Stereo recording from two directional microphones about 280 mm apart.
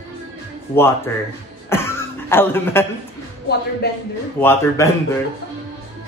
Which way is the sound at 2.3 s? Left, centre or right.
Centre.